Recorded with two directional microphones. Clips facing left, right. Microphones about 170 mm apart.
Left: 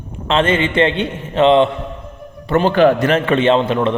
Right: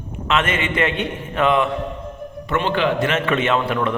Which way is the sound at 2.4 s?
40° left (ahead or behind).